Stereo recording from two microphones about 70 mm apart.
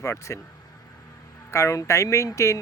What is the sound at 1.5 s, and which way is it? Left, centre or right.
Speech, left.